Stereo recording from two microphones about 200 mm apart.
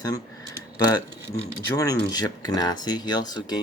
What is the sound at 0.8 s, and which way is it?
Speech, 20° left (ahead or behind).